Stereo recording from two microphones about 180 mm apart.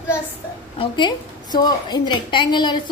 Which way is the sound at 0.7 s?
25° left (ahead or behind).